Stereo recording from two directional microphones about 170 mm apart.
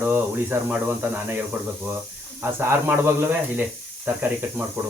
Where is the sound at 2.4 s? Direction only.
15° right (ahead or behind).